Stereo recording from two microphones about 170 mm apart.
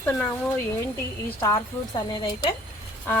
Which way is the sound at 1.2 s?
15° left (ahead or behind).